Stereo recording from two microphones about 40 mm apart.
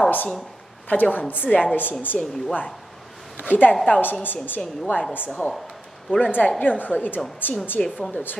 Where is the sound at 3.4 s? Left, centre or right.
Left.